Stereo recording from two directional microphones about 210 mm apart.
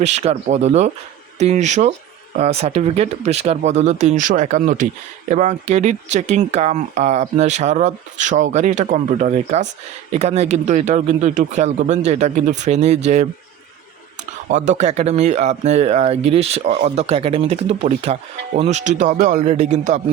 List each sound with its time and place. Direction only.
0.0 s speech: 30° right (ahead or behind)
14.5 s speech: 35° right (ahead or behind)